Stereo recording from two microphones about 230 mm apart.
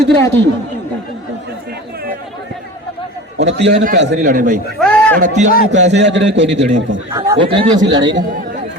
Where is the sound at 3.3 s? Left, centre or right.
Right.